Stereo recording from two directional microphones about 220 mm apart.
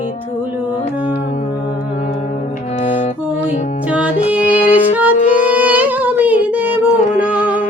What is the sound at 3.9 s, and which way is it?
Music, 5° right (ahead or behind).